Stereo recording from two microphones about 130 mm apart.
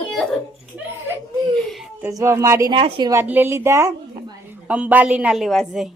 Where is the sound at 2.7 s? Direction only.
40° right (ahead or behind).